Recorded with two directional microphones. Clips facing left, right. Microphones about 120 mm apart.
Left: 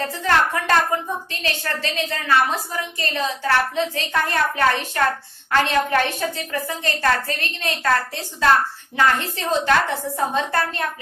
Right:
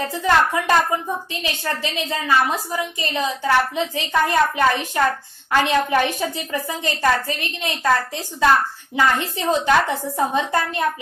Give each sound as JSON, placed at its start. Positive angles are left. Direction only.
{"t": 0.0, "sound": "a woman's voice", "side_deg": -15}